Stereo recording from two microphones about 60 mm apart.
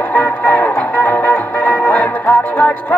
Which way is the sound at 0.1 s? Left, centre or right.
Left.